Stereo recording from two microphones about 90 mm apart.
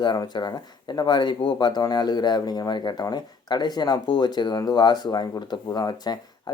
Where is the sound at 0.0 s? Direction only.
55° left (ahead or behind).